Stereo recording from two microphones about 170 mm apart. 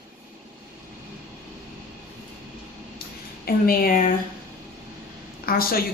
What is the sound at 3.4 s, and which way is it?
Speech, 60° left (ahead or behind).